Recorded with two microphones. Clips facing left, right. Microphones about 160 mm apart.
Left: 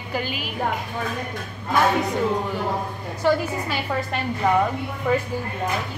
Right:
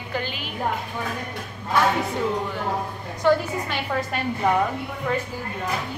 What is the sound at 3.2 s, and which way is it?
A woman's voice, 5° left (ahead or behind).